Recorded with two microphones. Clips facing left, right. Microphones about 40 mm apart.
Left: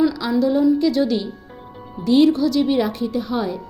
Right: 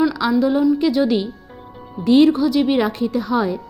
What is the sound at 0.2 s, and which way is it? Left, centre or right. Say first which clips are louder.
Speech: right 4 dB; right.